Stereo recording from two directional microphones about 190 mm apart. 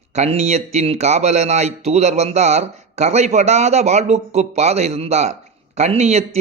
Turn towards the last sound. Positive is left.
turn(degrees=-35)  # may be behind; listen again after turning